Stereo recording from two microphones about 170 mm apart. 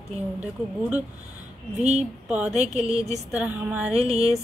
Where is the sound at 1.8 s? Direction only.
45° right (ahead or behind).